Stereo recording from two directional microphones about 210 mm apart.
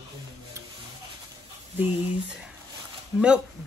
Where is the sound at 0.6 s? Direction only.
15° right (ahead or behind).